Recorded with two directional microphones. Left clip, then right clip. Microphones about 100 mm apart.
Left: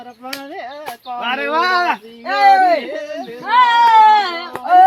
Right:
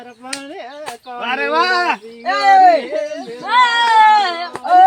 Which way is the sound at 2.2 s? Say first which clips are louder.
Right 1 dB; 40° right (ahead or behind).